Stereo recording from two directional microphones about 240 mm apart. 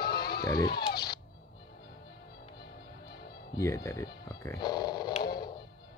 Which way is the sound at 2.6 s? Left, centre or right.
Left.